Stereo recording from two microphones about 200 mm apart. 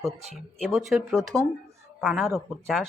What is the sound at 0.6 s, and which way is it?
Speech, 5° right (ahead or behind).